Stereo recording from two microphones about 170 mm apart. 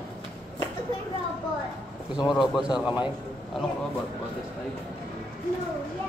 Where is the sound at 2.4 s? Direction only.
5° right (ahead or behind).